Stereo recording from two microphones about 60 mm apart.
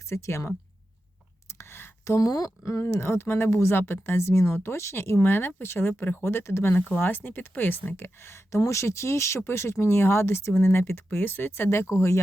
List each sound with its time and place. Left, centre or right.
0.1 s speech: left
1.5 s a sound: left
2.0 s speech: left
2.8 s speech: left
6.7 s speech: left